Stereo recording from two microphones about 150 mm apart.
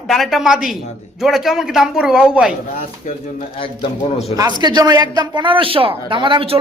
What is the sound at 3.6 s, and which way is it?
Speech, 35° left (ahead or behind).